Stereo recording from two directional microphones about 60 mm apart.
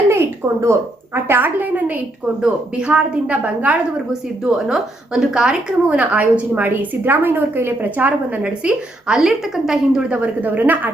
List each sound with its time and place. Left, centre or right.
0.1 s a woman's voice: right
1.3 s a woman's voice: right
2.4 s a woman's voice: centre
4.4 s a woman's voice: centre
6.5 s a woman's voice: right
8.4 s a woman's voice: centre
10.1 s a woman's voice: right